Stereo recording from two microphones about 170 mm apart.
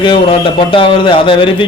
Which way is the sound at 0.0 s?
30° left (ahead or behind).